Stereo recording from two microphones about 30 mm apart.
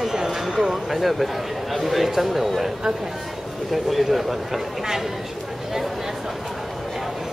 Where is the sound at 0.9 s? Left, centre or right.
Centre.